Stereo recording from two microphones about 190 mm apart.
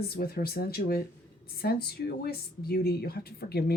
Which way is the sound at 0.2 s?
55° left (ahead or behind).